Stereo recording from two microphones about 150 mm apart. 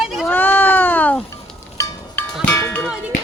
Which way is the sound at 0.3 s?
15° left (ahead or behind).